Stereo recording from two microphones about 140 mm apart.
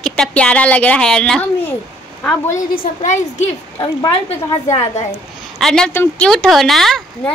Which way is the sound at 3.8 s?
40° left (ahead or behind).